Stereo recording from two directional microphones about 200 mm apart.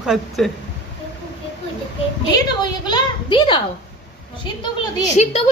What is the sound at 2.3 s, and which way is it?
A woman's voice, 20° left (ahead or behind).